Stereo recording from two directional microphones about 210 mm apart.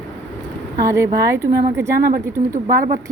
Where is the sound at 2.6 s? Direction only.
40° right (ahead or behind).